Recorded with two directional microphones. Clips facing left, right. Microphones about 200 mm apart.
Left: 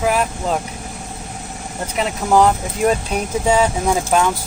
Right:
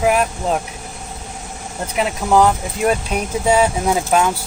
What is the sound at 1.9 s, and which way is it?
Speech, 5° right (ahead or behind).